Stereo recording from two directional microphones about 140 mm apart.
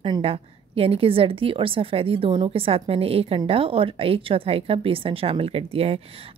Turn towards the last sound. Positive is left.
turn(degrees=-45)  # may be behind; listen again after turning